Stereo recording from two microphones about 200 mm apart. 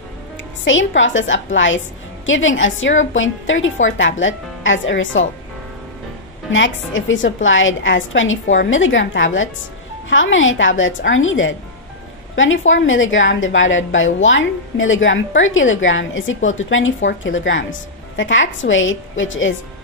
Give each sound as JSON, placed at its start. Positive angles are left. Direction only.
{"t": 0.7, "sound": "a woman's voice", "side_deg": 70}
{"t": 6.5, "sound": "a woman's voice", "side_deg": 70}